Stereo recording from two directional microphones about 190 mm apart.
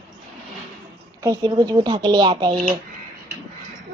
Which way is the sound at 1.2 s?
20° right (ahead or behind).